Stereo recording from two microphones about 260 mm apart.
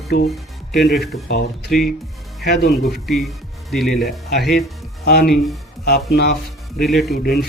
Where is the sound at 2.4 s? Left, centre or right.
Left.